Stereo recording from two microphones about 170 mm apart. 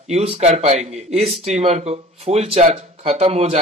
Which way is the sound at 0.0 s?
40° right (ahead or behind).